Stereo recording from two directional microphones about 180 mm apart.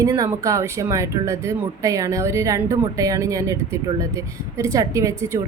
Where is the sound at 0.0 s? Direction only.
20° right (ahead or behind).